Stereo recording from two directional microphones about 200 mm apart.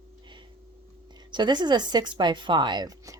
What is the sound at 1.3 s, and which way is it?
Speech, 20° right (ahead or behind).